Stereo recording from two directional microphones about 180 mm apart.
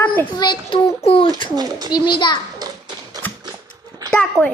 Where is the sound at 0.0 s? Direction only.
10° left (ahead or behind).